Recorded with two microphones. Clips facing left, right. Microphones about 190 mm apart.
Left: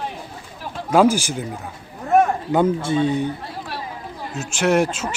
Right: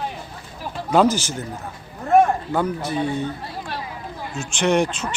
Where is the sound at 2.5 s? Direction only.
20° left (ahead or behind).